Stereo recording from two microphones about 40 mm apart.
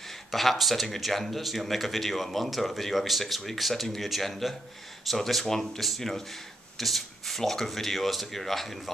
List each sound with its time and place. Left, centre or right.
0.3 s speech: centre